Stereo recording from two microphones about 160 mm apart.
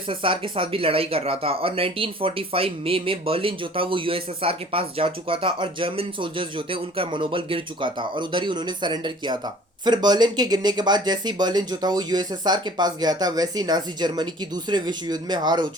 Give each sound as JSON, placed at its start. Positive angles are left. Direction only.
{"t": 0.1, "sound": "speech", "side_deg": -35}